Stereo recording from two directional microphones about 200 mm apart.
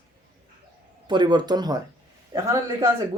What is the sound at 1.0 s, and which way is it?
A man's voice, 20° right (ahead or behind).